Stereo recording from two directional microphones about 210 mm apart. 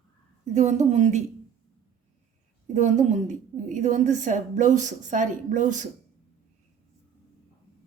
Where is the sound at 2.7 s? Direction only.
35° right (ahead or behind).